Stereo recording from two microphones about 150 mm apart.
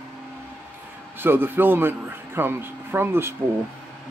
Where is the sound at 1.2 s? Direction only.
15° right (ahead or behind).